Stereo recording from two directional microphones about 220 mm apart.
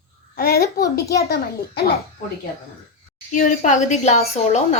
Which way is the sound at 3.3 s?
35° left (ahead or behind).